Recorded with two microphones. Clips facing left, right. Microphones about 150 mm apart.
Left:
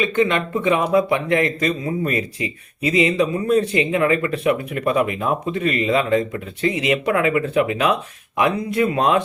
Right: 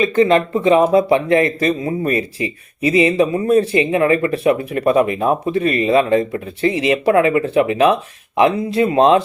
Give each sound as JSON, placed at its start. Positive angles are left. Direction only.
{"t": 0.0, "sound": "speech", "side_deg": -35}